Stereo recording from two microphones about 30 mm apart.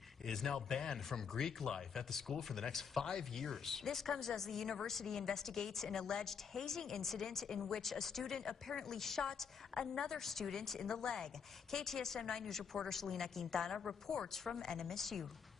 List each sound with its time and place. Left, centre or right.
0.3 s a man's voice: centre
5.9 s a woman's voice: left
6.2 s a man's voice: centre